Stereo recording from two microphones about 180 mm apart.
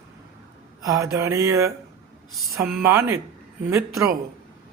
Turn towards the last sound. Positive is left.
turn(degrees=-15)  # may be behind; listen again after turning